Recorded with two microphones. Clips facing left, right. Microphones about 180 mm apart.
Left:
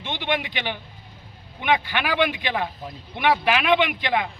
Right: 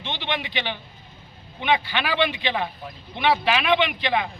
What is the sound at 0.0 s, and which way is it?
A man's voice, 15° left (ahead or behind).